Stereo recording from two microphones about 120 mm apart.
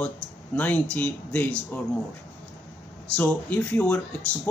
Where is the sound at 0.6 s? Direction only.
15° left (ahead or behind).